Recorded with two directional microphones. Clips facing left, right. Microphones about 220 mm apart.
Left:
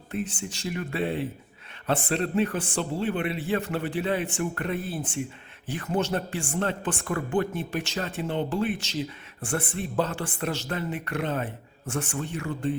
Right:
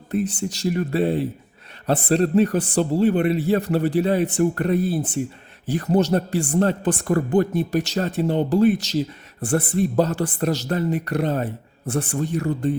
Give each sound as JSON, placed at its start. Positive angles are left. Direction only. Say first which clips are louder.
{"t": 0.1, "sound": "speech", "louder": "right 8 dB", "side_deg": -40}